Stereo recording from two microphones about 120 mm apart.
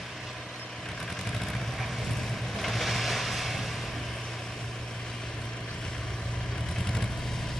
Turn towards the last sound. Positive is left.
turn(degrees=5)  # may be behind; listen again after turning